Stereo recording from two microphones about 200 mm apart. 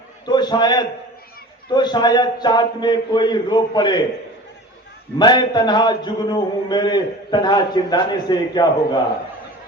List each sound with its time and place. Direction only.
0.3 s a man's voice: 20° left (ahead or behind)
5.2 s a man's voice: 20° left (ahead or behind)